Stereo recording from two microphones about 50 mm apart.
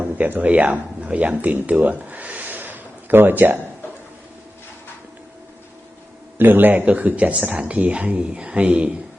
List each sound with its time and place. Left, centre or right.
0.3 s speech: right
6.3 s speech: right
6.8 s speech: right